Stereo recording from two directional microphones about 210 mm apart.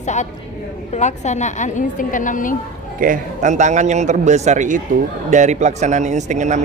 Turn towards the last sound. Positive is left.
turn(degrees=-35)  # may be behind; listen again after turning